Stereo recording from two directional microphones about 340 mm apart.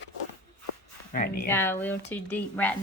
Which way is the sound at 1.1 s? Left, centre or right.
Left.